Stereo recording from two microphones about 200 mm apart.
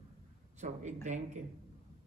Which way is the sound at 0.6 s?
35° right (ahead or behind).